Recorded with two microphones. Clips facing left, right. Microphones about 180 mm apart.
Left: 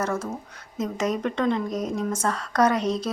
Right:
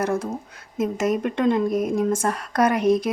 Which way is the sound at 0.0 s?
15° right (ahead or behind).